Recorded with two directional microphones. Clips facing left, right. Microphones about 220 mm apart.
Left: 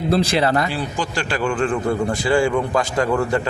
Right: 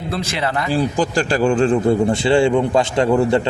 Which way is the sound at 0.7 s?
40° right (ahead or behind).